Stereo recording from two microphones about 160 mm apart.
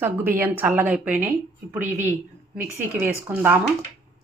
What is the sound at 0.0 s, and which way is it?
Speech, 10° right (ahead or behind).